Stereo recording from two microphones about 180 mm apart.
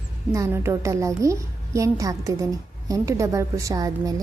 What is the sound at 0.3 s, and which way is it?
A woman's voice, 15° right (ahead or behind).